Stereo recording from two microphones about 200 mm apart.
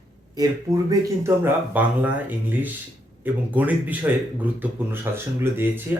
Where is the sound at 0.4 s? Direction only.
20° right (ahead or behind).